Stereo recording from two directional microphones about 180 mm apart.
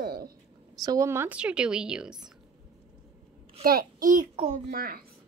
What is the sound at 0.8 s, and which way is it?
Speech, 15° right (ahead or behind).